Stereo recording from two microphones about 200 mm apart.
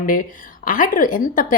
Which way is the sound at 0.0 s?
45° left (ahead or behind).